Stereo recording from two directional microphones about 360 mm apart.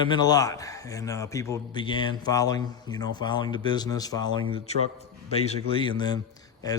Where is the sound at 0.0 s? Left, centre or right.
Centre.